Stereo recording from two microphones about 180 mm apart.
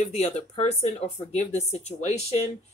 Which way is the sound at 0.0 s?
40° left (ahead or behind).